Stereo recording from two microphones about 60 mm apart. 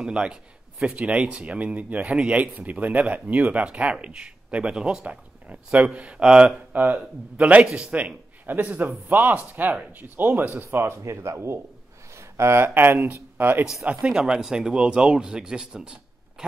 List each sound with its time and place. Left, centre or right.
0.0 s speech: centre
6.7 s speech: right
7.6 s speech: centre
7.9 s speech: right
10.6 s speech: right
13.8 s speech: centre